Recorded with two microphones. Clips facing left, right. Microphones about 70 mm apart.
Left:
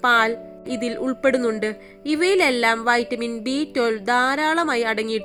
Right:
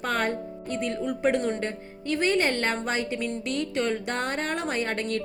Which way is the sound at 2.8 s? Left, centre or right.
Left.